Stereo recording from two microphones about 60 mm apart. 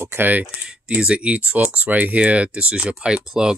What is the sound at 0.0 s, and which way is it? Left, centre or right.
Speech, right.